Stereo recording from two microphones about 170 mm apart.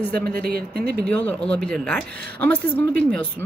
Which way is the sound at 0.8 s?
65° right (ahead or behind).